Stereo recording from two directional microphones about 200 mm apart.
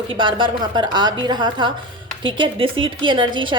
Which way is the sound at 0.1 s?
25° right (ahead or behind).